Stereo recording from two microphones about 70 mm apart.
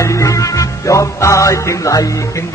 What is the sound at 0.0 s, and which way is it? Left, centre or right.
Music, left.